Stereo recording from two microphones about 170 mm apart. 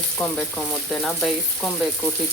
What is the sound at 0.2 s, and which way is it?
Speech, 5° left (ahead or behind).